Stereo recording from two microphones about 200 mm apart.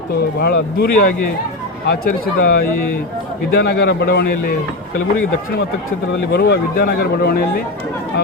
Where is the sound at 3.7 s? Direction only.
55° left (ahead or behind).